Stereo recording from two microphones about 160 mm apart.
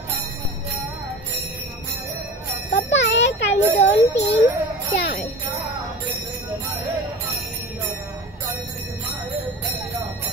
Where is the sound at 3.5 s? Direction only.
45° left (ahead or behind).